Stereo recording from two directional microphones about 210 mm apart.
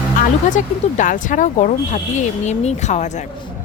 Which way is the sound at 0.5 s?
40° left (ahead or behind).